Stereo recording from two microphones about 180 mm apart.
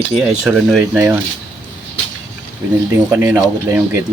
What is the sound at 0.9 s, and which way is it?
Speech, 10° right (ahead or behind).